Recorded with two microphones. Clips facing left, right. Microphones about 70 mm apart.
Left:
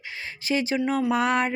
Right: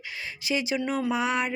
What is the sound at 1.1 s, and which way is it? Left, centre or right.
Speech, left.